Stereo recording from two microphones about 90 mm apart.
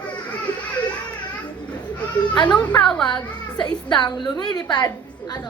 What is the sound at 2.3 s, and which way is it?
Speech, 55° left (ahead or behind).